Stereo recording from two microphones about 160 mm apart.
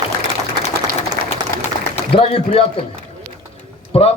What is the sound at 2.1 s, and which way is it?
Speech, 35° left (ahead or behind).